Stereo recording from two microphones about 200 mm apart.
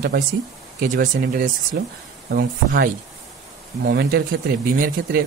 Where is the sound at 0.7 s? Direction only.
45° right (ahead or behind).